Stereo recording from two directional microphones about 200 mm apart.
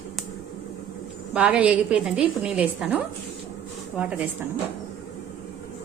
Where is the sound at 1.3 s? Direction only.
5° right (ahead or behind).